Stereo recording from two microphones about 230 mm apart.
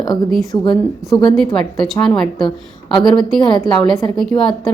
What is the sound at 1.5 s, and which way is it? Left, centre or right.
A woman's voice, centre.